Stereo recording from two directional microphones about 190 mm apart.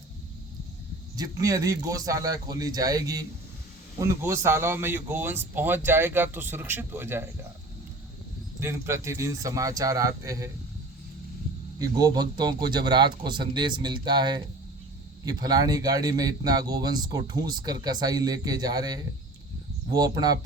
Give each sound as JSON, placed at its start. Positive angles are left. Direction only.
{"t": 1.1, "sound": "speech", "side_deg": -20}
{"t": 8.6, "sound": "speech", "side_deg": -15}
{"t": 11.8, "sound": "speech", "side_deg": -20}